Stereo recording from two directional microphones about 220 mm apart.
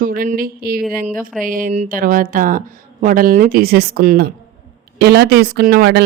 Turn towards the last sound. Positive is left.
turn(degrees=-45)  # may be behind; listen again after turning